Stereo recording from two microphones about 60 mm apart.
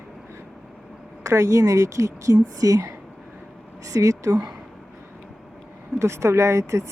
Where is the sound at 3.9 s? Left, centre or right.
Right.